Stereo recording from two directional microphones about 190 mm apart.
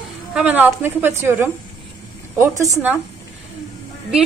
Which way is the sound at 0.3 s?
10° right (ahead or behind).